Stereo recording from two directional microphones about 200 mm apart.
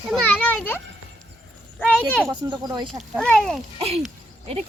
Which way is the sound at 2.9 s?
Centre (ahead or behind).